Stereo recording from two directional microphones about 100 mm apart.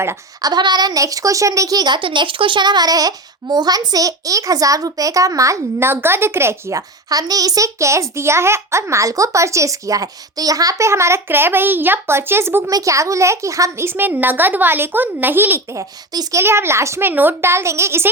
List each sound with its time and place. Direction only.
0.4 s a woman's voice: 45° right (ahead or behind); by 18.1 s 25° right (ahead or behind)